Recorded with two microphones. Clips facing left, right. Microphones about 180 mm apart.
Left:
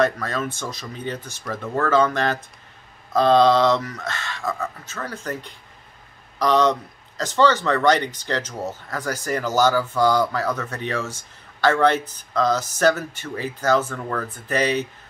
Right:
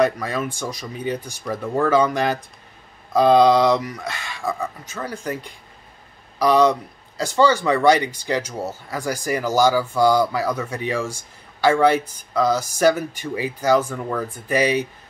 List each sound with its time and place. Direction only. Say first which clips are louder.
0.0 s speech: right 2 dB; 10° right (ahead or behind)